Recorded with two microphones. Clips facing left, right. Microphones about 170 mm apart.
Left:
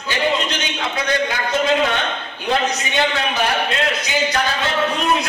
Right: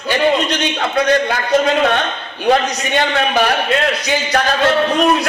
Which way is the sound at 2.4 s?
65° right (ahead or behind).